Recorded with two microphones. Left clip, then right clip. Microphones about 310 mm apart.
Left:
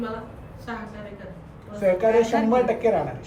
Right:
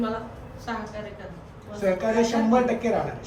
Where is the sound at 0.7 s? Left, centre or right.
Centre.